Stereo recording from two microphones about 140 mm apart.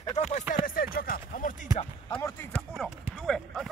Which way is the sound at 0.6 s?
90° left.